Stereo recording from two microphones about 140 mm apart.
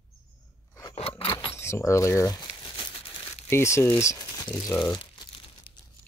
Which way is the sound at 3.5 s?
20° left (ahead or behind).